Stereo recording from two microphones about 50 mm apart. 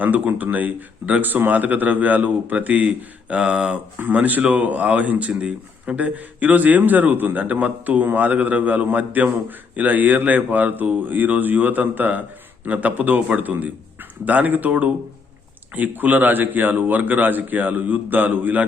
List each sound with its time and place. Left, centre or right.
0.0 s a man's voice: right
4.1 s a man's voice: right
5.3 s a man's voice: centre